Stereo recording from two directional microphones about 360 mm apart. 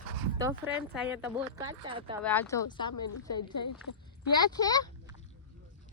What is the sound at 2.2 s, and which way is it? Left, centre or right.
Speech, centre.